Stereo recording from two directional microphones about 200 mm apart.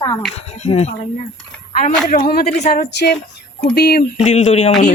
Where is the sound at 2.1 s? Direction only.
50° left (ahead or behind).